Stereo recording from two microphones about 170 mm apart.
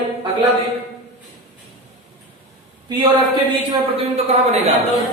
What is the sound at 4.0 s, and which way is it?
Speech, 35° right (ahead or behind).